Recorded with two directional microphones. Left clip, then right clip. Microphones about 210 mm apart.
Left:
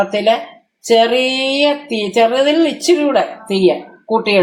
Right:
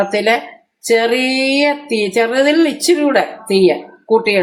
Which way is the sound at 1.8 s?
55° right (ahead or behind).